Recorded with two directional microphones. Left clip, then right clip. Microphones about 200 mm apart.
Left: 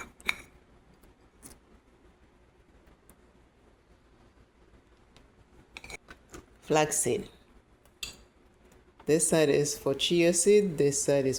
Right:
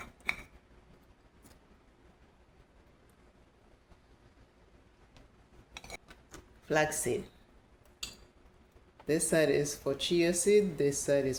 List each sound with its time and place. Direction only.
6.7 s speech: 30° left (ahead or behind)
9.0 s speech: 30° left (ahead or behind)